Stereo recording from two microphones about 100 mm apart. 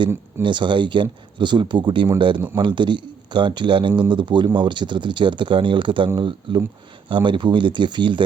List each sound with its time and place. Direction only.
0.4 s speech: 55° right (ahead or behind)